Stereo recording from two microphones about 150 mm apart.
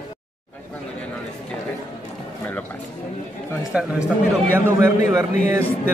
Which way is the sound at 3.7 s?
5° right (ahead or behind).